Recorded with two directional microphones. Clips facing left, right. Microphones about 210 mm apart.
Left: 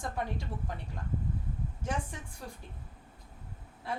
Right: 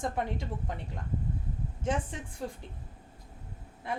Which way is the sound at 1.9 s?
20° right (ahead or behind).